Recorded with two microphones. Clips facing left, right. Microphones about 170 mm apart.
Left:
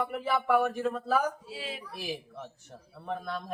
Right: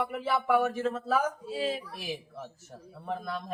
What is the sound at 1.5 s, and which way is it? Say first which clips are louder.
Speech: right 8 dB; 45° right (ahead or behind).